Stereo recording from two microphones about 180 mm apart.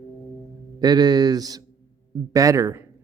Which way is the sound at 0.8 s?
20° right (ahead or behind).